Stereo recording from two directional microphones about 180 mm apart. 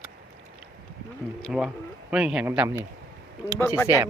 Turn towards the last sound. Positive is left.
turn(degrees=15)  # may be behind; listen again after turning